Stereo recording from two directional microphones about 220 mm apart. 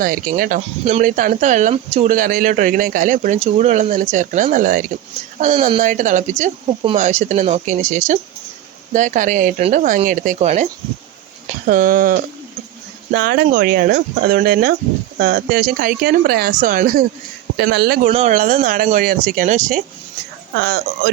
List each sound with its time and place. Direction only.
0.0 s speech: 40° right (ahead or behind)
18.0 s speech: 30° right (ahead or behind)
20.6 s speech: 45° right (ahead or behind)